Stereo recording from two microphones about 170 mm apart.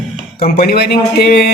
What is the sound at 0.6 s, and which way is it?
Speech, 70° left (ahead or behind).